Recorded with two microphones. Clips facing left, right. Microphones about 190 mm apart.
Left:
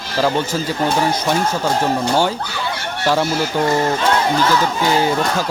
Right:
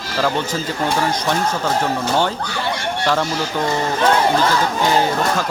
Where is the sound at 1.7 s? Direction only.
10° left (ahead or behind).